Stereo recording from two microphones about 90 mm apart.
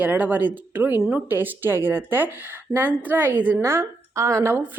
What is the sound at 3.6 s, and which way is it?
Speech, 30° right (ahead or behind).